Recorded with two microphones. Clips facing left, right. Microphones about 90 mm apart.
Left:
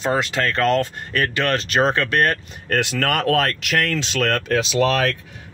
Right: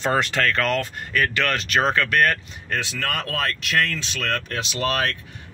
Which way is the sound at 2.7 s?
70° left (ahead or behind).